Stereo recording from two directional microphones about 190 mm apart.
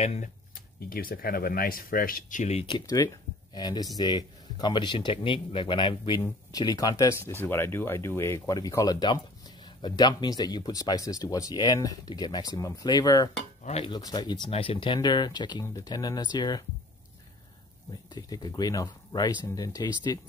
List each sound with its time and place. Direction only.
0.0 s speech: 35° left (ahead or behind)
0.8 s speech: 50° left (ahead or behind)
2.6 s speech: 20° left (ahead or behind)
18.1 s speech: 20° left (ahead or behind)